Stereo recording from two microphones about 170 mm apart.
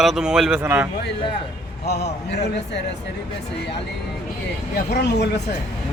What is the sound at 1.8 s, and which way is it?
Speech, 75° left (ahead or behind).